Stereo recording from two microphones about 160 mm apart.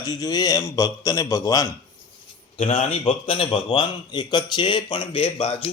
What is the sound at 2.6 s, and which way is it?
A man's voice, 35° left (ahead or behind).